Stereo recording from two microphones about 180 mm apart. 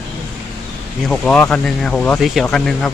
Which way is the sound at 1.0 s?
5° left (ahead or behind).